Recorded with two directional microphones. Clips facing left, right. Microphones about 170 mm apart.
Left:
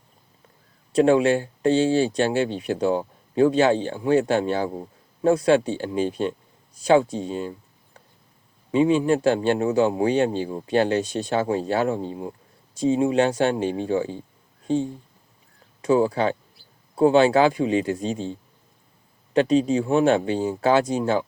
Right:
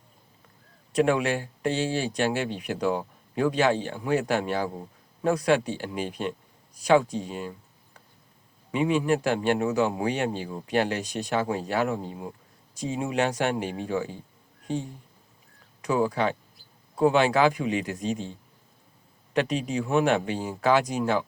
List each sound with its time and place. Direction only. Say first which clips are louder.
0.9 s speech: left 6 dB; 30° left (ahead or behind)
8.7 s speech: left 5 dB; 30° left (ahead or behind)